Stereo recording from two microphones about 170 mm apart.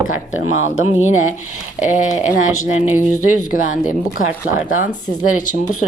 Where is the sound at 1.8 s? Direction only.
45° left (ahead or behind).